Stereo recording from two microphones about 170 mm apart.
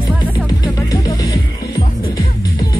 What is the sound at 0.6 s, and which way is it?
Music, 20° left (ahead or behind).